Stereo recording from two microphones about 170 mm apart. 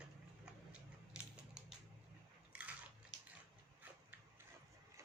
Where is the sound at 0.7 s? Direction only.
5° right (ahead or behind).